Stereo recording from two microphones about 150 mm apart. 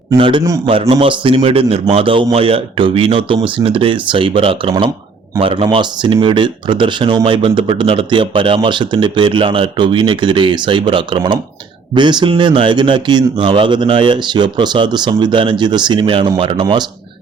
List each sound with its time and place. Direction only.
0.2 s speech: 35° right (ahead or behind)
0.4 s a man's voice: 20° right (ahead or behind)
0.7 s speech: 40° right (ahead or behind)